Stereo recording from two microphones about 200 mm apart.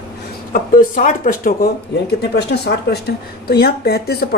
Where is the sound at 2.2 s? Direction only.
55° left (ahead or behind).